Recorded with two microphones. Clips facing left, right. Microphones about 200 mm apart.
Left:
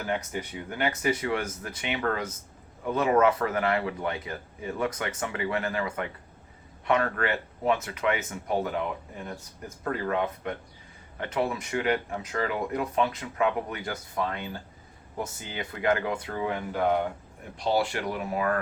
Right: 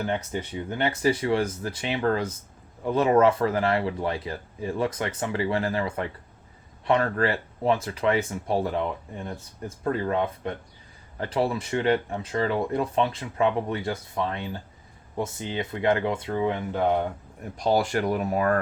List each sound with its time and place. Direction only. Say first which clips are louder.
0.0 s speech: right 3 dB; 30° right (ahead or behind)
17.6 s speech: right 3 dB; 45° right (ahead or behind)